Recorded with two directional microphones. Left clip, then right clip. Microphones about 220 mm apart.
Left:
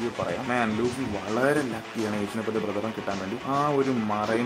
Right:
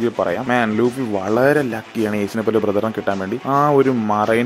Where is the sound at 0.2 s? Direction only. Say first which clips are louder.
Right 8 dB; 35° right (ahead or behind).